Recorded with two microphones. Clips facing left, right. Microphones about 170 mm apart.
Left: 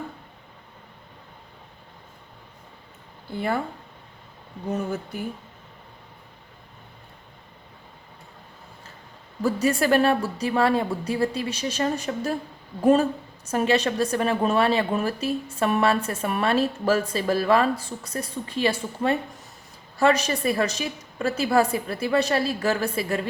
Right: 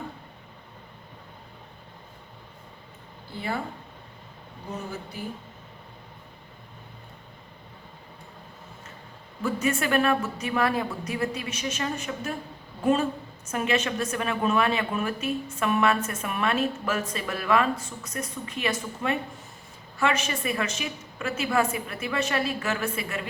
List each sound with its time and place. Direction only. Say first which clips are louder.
9.4 s a woman's voice: left 4 dB; 35° left (ahead or behind)